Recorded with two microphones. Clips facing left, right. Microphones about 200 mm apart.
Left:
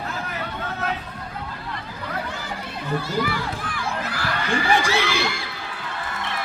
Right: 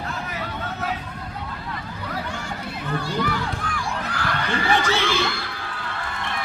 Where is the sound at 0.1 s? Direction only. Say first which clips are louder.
Even; centre (ahead or behind).